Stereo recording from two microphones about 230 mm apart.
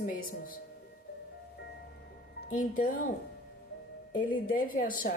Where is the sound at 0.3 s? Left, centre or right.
Left.